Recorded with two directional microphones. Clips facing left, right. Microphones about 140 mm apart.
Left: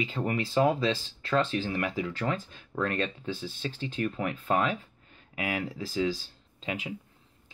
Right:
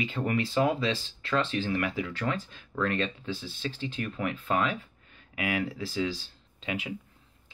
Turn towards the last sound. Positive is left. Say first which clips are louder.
# right 1 dB
turn(degrees=35)  # may be behind; listen again after turning